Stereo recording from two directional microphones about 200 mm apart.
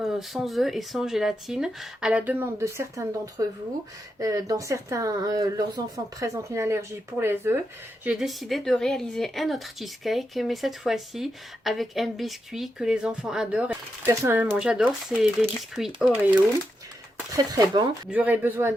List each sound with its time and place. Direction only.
0.0 s a woman's voice: centre (ahead or behind)
17.3 s speech: 20° right (ahead or behind)